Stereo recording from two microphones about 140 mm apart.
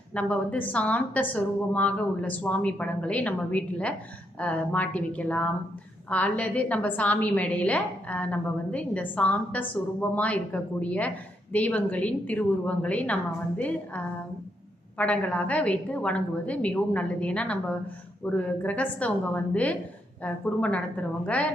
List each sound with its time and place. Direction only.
0.1 s a woman's voice: 10° left (ahead or behind)